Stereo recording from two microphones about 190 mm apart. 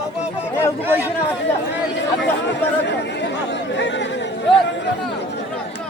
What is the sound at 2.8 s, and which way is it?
Chatter, 65° left (ahead or behind).